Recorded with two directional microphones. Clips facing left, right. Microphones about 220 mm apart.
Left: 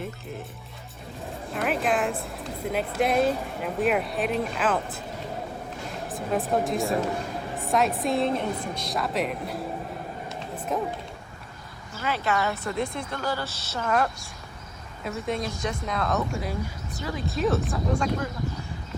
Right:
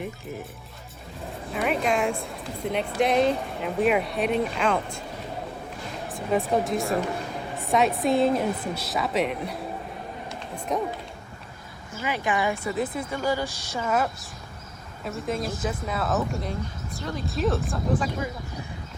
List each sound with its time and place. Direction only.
1.5 s speech: centre (ahead or behind)
6.1 s speech: centre (ahead or behind)
10.7 s speech: centre (ahead or behind)
12.0 s speech: 15° right (ahead or behind)